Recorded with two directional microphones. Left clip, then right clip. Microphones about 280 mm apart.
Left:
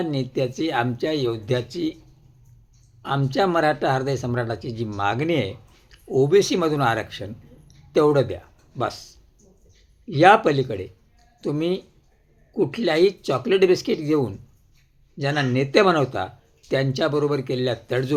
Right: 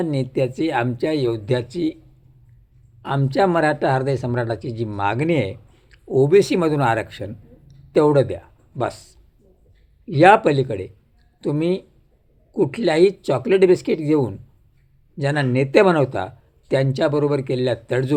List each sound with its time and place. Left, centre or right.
0.0 s speech: centre
3.0 s speech: centre